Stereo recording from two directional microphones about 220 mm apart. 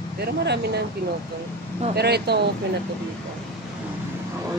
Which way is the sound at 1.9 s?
45° right (ahead or behind).